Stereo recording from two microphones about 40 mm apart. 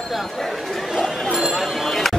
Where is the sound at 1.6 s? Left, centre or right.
Centre.